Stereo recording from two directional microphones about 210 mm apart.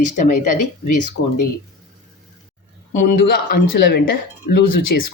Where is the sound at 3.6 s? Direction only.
55° left (ahead or behind).